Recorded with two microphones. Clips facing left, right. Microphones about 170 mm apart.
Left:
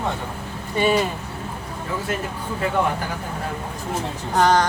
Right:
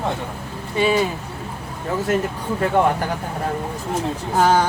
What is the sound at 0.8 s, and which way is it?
Speech, centre (ahead or behind).